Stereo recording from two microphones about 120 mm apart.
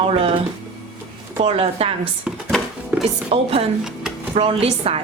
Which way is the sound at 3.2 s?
55° right (ahead or behind).